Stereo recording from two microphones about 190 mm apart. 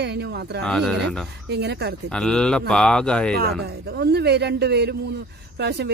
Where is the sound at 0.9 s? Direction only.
60° right (ahead or behind).